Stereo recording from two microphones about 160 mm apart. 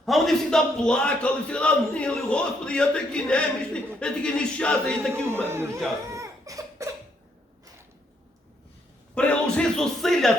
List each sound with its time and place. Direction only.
0.0 s a man's voice: centre (ahead or behind)
5.1 s speech: 15° right (ahead or behind)
6.1 s crying: 20° right (ahead or behind)
9.1 s music: 5° left (ahead or behind)